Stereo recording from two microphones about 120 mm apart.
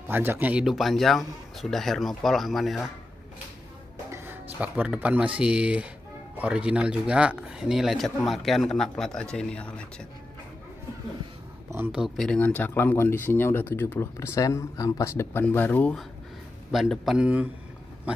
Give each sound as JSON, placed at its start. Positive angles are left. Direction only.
{"t": 0.1, "sound": "speech", "side_deg": -20}
{"t": 4.1, "sound": "speech", "side_deg": -15}
{"t": 11.9, "sound": "speech", "side_deg": -5}
{"t": 12.3, "sound": "speech", "side_deg": 10}
{"t": 16.7, "sound": "speech", "side_deg": 0}